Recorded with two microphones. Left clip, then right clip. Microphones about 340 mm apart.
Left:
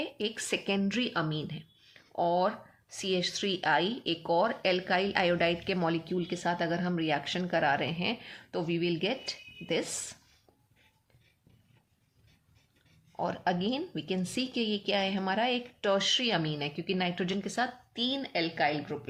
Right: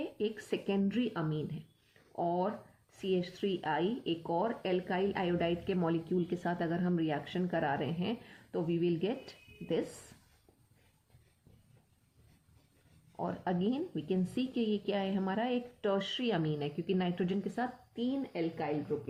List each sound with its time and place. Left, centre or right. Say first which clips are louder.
0.0 s speech: left 2 dB; centre
13.1 s speech: left 5 dB; centre